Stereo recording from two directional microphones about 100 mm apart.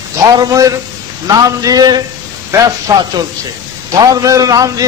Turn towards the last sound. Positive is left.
turn(degrees=-35)  # may be behind; listen again after turning